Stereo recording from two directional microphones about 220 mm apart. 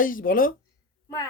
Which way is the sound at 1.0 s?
15° left (ahead or behind).